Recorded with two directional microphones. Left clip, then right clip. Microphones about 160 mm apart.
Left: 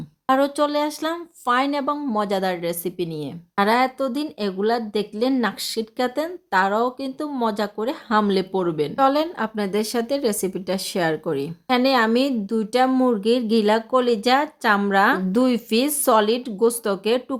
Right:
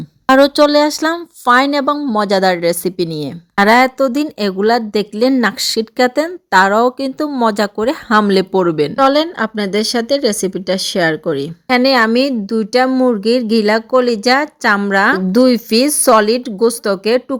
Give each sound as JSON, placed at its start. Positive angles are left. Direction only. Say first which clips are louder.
{"t": 0.3, "sound": "speech", "louder": "right 10 dB", "side_deg": -45}
{"t": 9.0, "sound": "a woman's voice", "louder": "right 6 dB", "side_deg": -30}